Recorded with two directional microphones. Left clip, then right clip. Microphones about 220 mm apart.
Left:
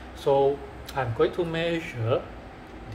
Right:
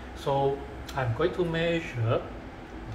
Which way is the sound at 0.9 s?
50° left (ahead or behind).